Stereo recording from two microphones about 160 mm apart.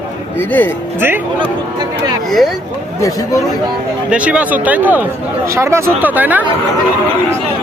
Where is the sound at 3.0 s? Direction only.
20° left (ahead or behind).